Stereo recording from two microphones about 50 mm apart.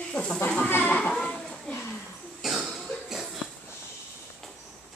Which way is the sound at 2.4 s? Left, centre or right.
Centre.